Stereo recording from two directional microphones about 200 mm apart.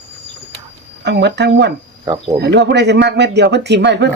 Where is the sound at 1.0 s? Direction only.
60° right (ahead or behind).